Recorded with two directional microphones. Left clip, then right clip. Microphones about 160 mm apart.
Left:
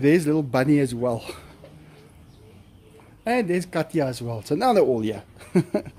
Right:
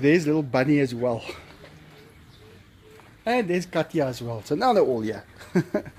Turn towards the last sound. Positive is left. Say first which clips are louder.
# left 2 dB
turn(degrees=15)  # may be behind; listen again after turning